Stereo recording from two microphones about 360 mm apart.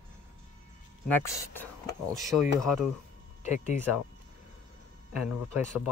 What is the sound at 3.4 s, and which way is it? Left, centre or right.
Speech, centre.